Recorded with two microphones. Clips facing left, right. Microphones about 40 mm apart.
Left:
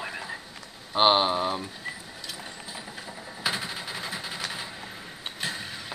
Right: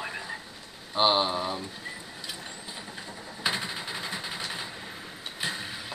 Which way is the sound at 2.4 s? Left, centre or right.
Centre.